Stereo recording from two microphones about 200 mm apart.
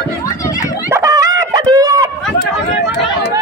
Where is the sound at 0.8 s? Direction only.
15° right (ahead or behind).